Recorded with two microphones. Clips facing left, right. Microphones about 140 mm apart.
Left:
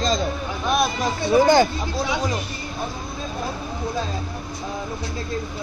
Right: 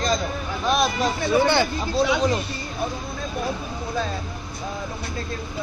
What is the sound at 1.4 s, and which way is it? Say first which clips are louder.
Speech: left 6 dB; 40° left (ahead or behind).